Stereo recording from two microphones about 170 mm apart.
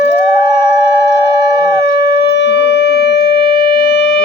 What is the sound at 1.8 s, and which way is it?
Shofar, 85° left.